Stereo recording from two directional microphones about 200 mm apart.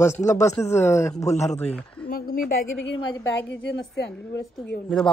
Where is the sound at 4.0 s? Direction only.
60° left (ahead or behind).